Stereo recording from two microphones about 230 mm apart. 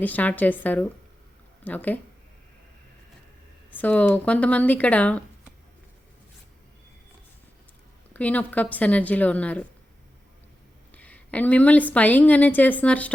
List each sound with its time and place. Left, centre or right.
0.0 s a woman's voice: centre
3.7 s a woman's voice: centre
8.1 s a woman's voice: centre
10.9 s a woman's voice: centre